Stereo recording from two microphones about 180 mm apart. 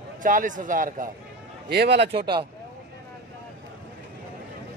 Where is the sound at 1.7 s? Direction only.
65° right (ahead or behind).